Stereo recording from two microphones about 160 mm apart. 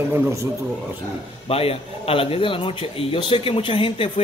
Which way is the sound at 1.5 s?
35° left (ahead or behind).